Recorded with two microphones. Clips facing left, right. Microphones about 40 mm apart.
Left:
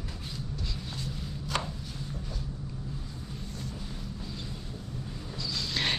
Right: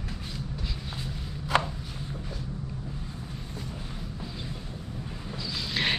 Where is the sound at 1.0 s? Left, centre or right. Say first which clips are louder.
Right 2 dB; right.